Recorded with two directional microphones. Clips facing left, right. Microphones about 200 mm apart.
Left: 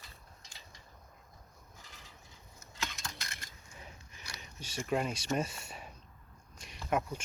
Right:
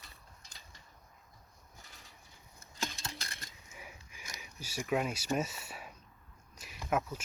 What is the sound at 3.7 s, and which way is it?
Sniff, 10° right (ahead or behind).